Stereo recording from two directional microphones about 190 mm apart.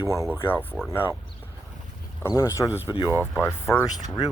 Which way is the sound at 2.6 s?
10° right (ahead or behind).